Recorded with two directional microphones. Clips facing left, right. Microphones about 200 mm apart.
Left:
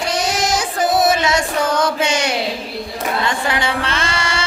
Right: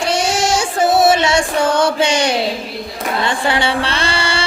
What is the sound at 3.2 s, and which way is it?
Mantra, 30° right (ahead or behind).